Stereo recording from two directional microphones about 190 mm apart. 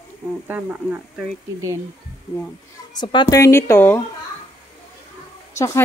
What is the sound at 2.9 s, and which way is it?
Speech, 25° left (ahead or behind).